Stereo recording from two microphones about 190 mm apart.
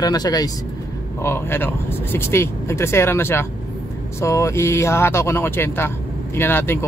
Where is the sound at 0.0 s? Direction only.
20° left (ahead or behind).